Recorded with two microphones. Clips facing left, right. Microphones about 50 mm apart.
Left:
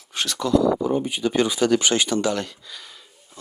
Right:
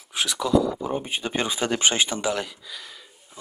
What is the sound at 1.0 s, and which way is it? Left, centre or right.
Speech, right.